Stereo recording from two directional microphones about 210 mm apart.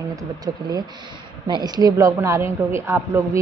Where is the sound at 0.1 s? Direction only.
15° right (ahead or behind).